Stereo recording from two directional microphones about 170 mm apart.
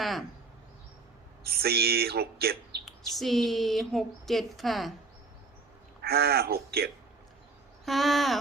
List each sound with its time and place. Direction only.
0.0 s speech: centre (ahead or behind)
1.5 s speech: 65° right (ahead or behind)
2.8 s speech: centre (ahead or behind)
6.0 s speech: 65° right (ahead or behind)
7.9 s speech: centre (ahead or behind)